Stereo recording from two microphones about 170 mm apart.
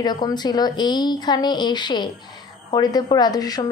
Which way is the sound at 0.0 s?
25° left (ahead or behind).